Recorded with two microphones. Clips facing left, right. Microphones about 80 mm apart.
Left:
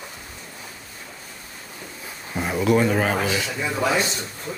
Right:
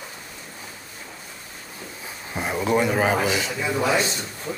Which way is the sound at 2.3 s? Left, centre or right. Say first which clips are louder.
Left 2 dB; centre.